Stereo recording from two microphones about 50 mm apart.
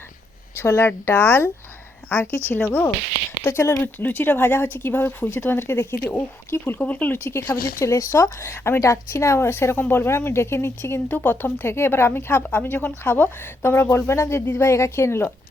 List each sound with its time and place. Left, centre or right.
0.5 s speech: left
1.1 s speech: left
2.5 s speech: left
3.4 s speech: left
3.9 s speech: left
5.5 s speech: left
6.7 s speech: left
7.1 s speech: left
8.8 s speech: left
11.1 s speech: left
13.6 s speech: left
14.6 s speech: left